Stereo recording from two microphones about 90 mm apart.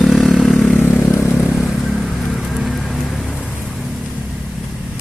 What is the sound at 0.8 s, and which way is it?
Vehicle, 20° left (ahead or behind).